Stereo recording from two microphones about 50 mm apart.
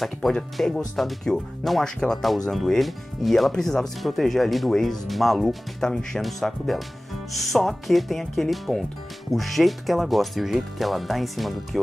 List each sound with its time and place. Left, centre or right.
0.6 s speech: centre